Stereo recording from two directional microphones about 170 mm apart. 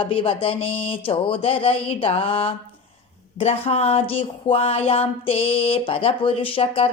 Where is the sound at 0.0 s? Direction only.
30° left (ahead or behind).